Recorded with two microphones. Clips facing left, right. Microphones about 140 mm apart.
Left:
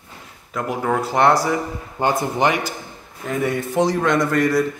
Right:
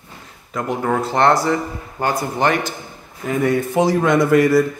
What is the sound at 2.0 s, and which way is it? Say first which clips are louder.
Speech: even; 20° left (ahead or behind).